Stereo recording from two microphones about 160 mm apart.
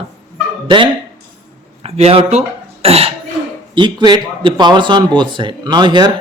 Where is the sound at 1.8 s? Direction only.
40° right (ahead or behind).